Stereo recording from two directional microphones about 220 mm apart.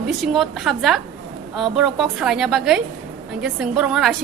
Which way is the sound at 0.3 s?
Centre (ahead or behind).